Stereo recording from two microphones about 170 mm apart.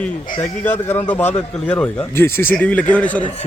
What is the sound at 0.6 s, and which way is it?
A man's voice, 10° left (ahead or behind).